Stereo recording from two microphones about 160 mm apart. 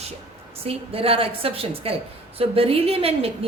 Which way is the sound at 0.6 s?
35° right (ahead or behind).